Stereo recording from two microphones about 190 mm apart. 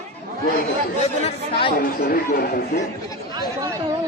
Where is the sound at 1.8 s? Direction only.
45° left (ahead or behind).